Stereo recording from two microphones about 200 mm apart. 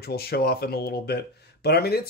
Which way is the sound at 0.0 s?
50° left (ahead or behind).